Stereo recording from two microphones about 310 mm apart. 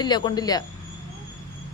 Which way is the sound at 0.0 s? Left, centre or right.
Centre.